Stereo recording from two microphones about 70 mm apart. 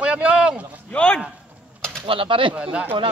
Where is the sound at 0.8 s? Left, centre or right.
Centre.